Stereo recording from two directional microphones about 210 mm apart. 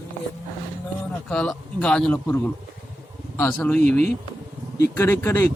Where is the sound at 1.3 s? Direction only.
5° left (ahead or behind).